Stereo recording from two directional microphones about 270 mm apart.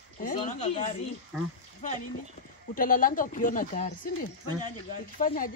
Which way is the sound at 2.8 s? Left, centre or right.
Left.